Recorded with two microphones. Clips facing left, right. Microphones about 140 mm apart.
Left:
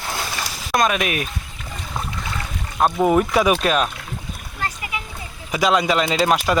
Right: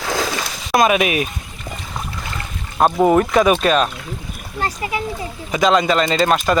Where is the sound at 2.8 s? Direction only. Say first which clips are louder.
Right 3 dB; 5° right (ahead or behind).